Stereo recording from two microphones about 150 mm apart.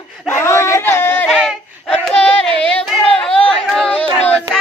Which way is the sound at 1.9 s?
10° left (ahead or behind).